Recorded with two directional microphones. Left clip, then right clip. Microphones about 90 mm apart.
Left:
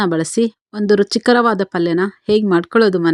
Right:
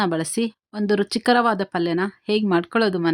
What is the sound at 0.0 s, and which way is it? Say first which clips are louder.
A woman's voice: left 6 dB; 45° left (ahead or behind).